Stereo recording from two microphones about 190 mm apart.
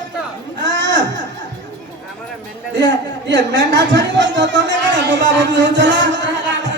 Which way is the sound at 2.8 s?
70° right (ahead or behind).